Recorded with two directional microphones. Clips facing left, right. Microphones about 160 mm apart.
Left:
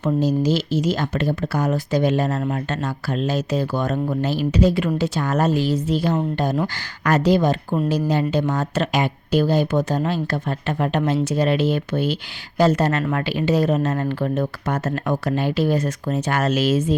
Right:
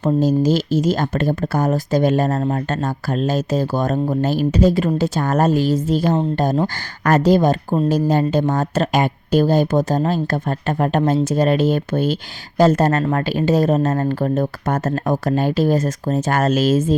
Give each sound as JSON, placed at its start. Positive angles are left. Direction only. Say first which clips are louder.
{"t": 0.0, "sound": "speech", "louder": "right 3 dB", "side_deg": -45}